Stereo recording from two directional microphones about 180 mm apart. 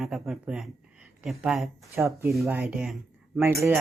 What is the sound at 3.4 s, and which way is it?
Speech, 15° right (ahead or behind).